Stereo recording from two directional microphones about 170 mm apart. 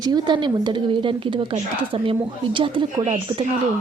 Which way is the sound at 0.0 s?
25° right (ahead or behind).